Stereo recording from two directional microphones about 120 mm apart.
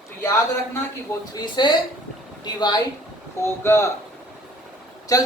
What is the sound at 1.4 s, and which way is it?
A woman's voice, 40° left (ahead or behind).